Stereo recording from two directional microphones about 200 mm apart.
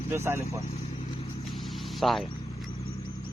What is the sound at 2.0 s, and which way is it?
Speech, centre (ahead or behind).